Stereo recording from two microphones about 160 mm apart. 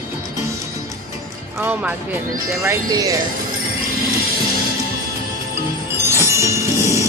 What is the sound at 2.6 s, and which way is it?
Speech, 25° right (ahead or behind).